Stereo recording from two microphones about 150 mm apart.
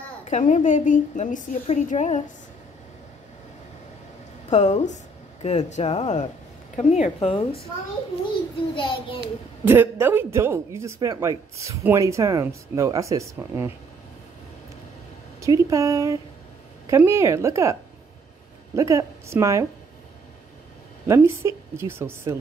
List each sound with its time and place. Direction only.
0.2 s a woman's voice: 50° left (ahead or behind)
4.5 s a woman's voice: 50° left (ahead or behind)
8.7 s a child's voice: 35° left (ahead or behind)
9.7 s speech: 15° right (ahead or behind)
15.4 s speech: 20° right (ahead or behind)
18.8 s speech: 20° right (ahead or behind)
21.1 s a woman's voice: 20° right (ahead or behind)